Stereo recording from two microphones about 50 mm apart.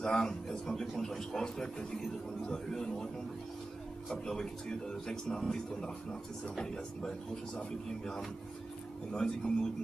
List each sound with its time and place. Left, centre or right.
0.0 s a man's voice: centre
4.1 s a man's voice: centre